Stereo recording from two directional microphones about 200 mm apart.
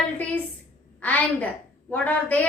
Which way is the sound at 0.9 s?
10° left (ahead or behind).